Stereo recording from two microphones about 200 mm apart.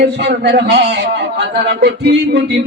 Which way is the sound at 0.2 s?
55° right (ahead or behind).